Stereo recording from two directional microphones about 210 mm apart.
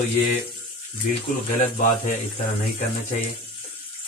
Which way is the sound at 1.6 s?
40° left (ahead or behind).